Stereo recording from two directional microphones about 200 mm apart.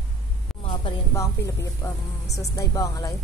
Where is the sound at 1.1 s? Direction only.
15° left (ahead or behind).